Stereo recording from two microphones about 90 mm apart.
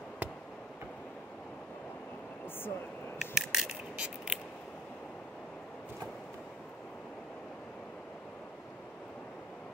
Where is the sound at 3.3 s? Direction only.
5° right (ahead or behind).